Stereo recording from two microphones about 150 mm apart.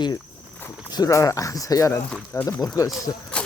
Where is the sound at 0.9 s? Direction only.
25° left (ahead or behind).